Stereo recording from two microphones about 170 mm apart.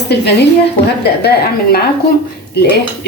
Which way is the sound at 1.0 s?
70° left (ahead or behind).